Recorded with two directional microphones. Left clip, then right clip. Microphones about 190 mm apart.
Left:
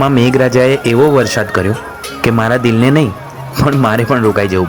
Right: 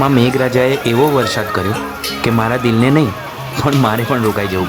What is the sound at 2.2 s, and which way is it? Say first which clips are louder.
Speech: left 4 dB; 15° left (ahead or behind).